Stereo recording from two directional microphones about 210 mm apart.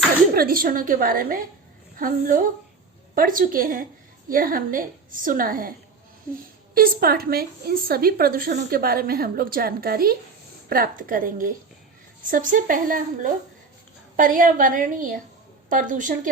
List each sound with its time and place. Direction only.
0.3 s a woman's voice: 45° right (ahead or behind)
6.7 s a woman's voice: 45° right (ahead or behind)